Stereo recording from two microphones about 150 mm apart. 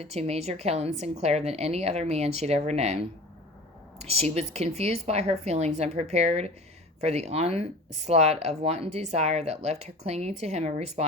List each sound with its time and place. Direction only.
0.0 s speech: 45° right (ahead or behind)